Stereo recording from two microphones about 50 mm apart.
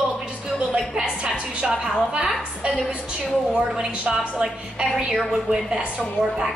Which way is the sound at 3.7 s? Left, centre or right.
Centre.